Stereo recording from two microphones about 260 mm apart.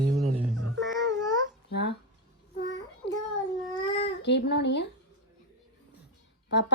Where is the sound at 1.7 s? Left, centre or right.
Left.